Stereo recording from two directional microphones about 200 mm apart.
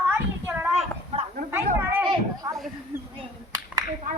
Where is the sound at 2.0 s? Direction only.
15° right (ahead or behind).